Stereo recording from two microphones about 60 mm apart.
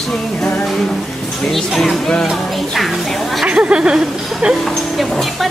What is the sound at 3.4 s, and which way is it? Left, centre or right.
Speech, centre.